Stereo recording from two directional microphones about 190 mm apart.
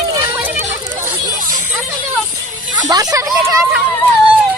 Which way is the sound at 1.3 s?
45° right (ahead or behind).